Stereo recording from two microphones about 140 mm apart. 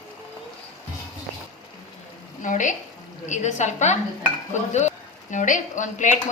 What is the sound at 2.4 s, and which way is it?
A woman's voice, 65° left (ahead or behind).